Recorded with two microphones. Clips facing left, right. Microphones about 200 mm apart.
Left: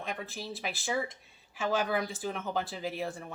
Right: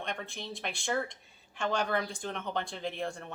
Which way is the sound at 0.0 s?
5° left (ahead or behind).